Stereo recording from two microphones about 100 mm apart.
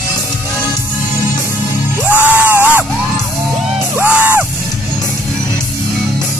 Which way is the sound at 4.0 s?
20° right (ahead or behind).